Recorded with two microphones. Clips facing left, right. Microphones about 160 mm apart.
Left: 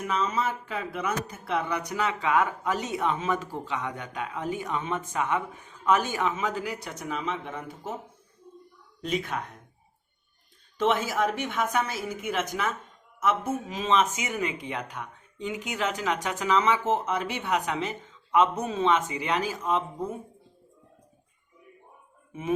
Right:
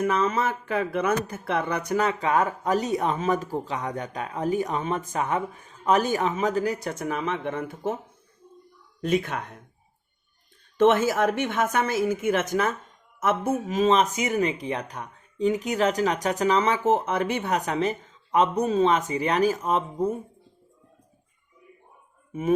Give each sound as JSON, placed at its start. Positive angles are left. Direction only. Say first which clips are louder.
{"t": 0.0, "sound": "speech", "louder": "right 4 dB", "side_deg": -60}
{"t": 1.9, "sound": "speech", "louder": "right 4 dB", "side_deg": -45}
{"t": 7.0, "sound": "speech", "louder": "right 3 dB", "side_deg": -55}
{"t": 9.0, "sound": "a woman's voice", "louder": "right 5 dB", "side_deg": -50}
{"t": 10.8, "sound": "a woman's voice", "louder": "right 6 dB", "side_deg": -50}